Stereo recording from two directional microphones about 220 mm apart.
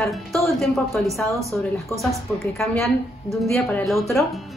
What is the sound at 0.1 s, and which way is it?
A woman's voice, centre (ahead or behind).